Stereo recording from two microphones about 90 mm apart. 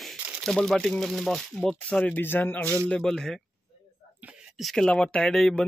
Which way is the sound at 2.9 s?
5° left (ahead or behind).